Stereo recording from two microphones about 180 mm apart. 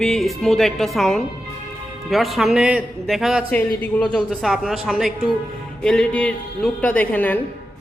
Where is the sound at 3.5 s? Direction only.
10° left (ahead or behind).